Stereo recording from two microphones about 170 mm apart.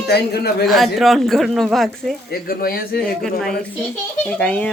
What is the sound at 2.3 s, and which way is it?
Speech, 60° left (ahead or behind).